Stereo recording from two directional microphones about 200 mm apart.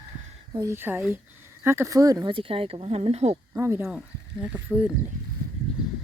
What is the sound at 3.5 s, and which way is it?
Speech, 15° right (ahead or behind).